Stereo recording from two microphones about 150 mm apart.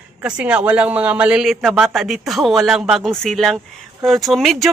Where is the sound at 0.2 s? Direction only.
10° right (ahead or behind).